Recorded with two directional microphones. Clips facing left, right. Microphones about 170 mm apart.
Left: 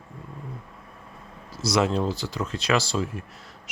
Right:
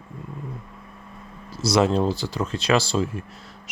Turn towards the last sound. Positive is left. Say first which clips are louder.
# right 3 dB
turn(degrees=-30)  # may be behind; listen again after turning